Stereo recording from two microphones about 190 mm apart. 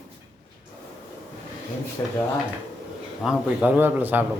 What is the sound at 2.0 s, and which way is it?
Speech, 20° left (ahead or behind).